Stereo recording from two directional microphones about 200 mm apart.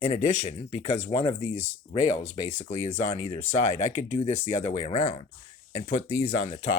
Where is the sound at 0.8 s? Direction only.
25° left (ahead or behind).